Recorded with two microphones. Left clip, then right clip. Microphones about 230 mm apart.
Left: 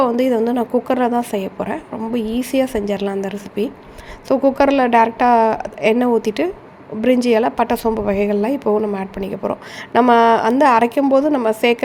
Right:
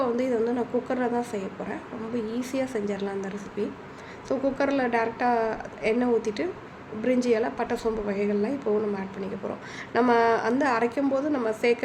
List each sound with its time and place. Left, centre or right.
0.0 s a woman's voice: left